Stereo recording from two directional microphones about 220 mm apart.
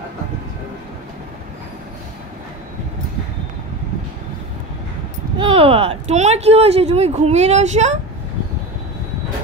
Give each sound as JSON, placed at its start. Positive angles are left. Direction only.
{"t": 5.4, "sound": "speech", "side_deg": -25}